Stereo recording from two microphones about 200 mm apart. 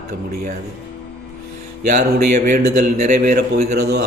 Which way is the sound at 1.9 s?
35° right (ahead or behind).